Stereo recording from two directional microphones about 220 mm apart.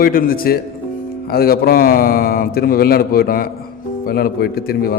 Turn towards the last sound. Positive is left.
turn(degrees=45)  # may be behind; listen again after turning